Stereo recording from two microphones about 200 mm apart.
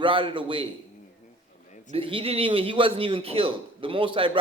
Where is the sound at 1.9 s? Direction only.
25° right (ahead or behind).